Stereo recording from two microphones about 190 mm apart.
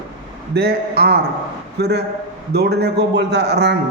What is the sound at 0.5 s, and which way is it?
Speech, 55° right (ahead or behind).